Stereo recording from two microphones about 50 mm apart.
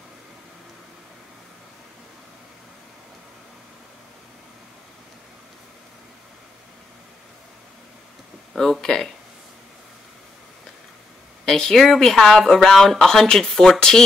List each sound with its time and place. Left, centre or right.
8.5 s speech: centre
11.4 s speech: centre